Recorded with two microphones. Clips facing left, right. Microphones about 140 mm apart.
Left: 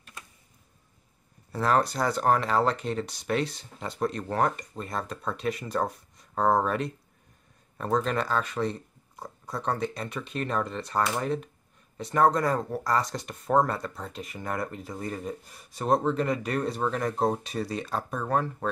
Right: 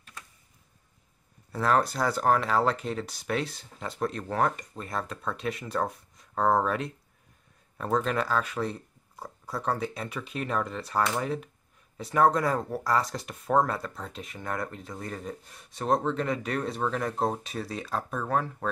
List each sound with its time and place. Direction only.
1.5 s speech: centre (ahead or behind)